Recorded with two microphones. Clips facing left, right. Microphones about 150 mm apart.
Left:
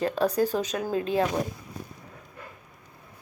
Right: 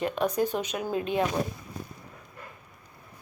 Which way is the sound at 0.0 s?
35° left (ahead or behind).